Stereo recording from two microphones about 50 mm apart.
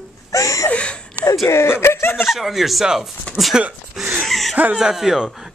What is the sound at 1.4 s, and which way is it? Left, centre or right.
Chuckle, left.